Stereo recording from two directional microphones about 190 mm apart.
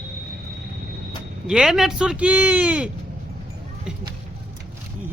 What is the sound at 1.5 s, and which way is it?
Speech, centre (ahead or behind).